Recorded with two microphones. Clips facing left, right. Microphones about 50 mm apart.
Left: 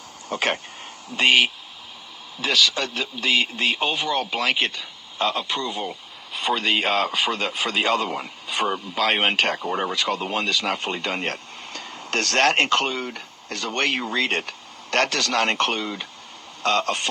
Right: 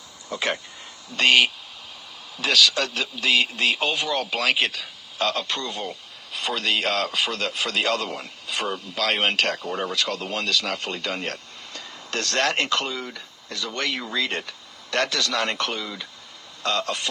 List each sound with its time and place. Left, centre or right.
0.3 s speech: left
1.1 s a man's voice: centre; by 17.1 s left